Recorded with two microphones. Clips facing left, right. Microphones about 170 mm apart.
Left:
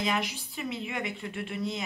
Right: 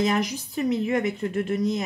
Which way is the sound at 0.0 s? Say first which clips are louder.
Right 7 dB; 40° right (ahead or behind).